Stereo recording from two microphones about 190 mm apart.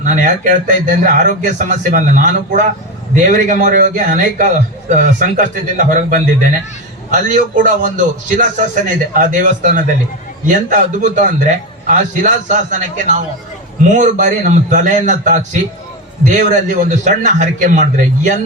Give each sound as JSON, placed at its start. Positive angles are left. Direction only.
{"t": 0.0, "sound": "a man's voice", "side_deg": -40}